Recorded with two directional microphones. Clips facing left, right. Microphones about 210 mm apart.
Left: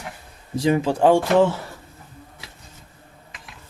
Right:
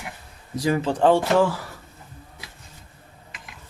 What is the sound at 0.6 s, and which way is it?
Speech, 20° left (ahead or behind).